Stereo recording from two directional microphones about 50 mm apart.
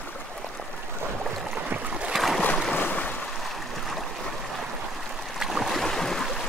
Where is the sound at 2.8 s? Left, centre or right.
Left.